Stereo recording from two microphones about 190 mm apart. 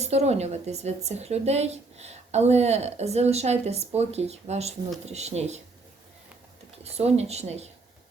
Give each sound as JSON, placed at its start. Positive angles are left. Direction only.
{"t": 0.0, "sound": "a woman's voice", "side_deg": -35}
{"t": 6.8, "sound": "a woman's voice", "side_deg": -35}